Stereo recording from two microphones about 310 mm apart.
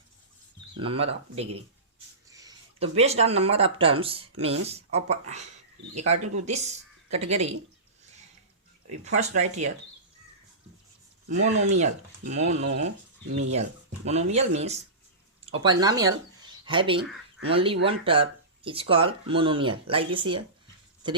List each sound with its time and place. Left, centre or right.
0.8 s speech: centre
9.0 s speech: right
11.3 s speech: right